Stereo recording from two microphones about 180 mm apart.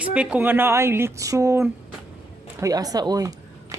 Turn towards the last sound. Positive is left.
turn(degrees=-20)  # may be behind; listen again after turning